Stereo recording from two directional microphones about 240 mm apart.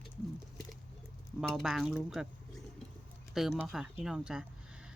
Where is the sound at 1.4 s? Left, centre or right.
Centre.